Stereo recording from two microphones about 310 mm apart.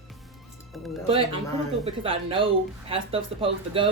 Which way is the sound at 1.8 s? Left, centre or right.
Centre.